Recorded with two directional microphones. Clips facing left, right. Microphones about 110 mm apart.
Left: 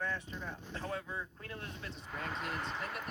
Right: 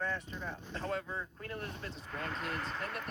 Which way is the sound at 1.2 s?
45° right (ahead or behind).